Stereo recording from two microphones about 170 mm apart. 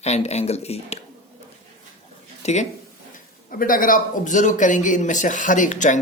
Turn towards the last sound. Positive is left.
turn(degrees=50)  # may be behind; listen again after turning